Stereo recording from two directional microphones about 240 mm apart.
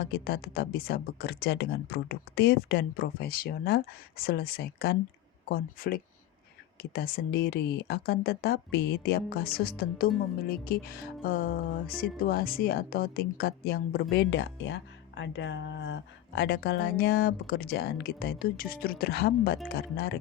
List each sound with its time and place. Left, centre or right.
0.0 s music: left